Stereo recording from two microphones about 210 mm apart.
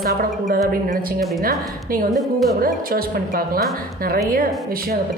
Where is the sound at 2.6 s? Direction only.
45° right (ahead or behind).